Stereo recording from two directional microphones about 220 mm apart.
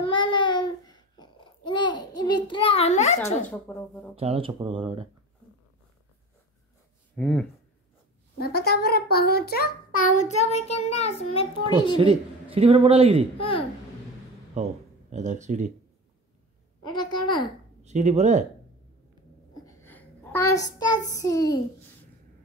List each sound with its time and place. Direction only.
0.0 s babbling: 20° left (ahead or behind)
3.4 s speech: 5° left (ahead or behind)
4.1 s a man's voice: 25° right (ahead or behind)
7.2 s speech: 5° left (ahead or behind)
8.4 s a child's voice: 45° left (ahead or behind)
9.9 s child singing: 35° left (ahead or behind)
12.0 s a man's voice: 25° right (ahead or behind)
13.4 s child singing: 25° left (ahead or behind)
14.5 s speech: 30° right (ahead or behind)
16.8 s child singing: 20° left (ahead or behind)
17.8 s speech: 30° right (ahead or behind)
19.5 s a sound: 15° left (ahead or behind)
21.1 s a child's voice: 15° left (ahead or behind)